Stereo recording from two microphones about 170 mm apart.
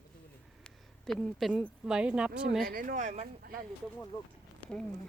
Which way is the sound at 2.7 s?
55° right (ahead or behind).